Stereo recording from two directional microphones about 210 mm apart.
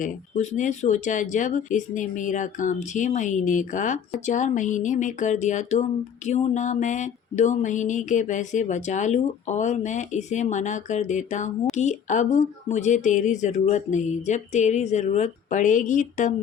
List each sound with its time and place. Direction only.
0.0 s speech: 35° left (ahead or behind)